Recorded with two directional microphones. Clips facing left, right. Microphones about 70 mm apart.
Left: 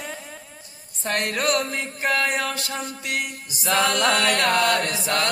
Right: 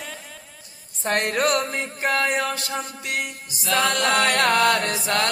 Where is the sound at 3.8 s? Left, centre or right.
Right.